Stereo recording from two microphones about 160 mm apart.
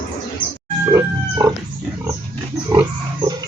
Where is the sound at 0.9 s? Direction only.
20° right (ahead or behind).